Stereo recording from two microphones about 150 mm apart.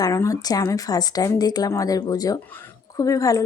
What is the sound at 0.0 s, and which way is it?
Speech, 20° left (ahead or behind).